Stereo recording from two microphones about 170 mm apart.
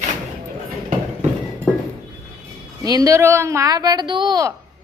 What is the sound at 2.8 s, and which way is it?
Speech, 20° right (ahead or behind).